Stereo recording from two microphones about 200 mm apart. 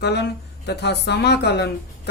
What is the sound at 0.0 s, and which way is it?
Speech, 55° left (ahead or behind).